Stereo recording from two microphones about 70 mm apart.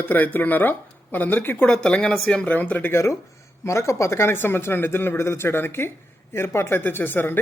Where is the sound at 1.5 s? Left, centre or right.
Centre.